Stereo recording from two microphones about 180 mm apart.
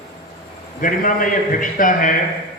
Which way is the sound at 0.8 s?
50° left (ahead or behind).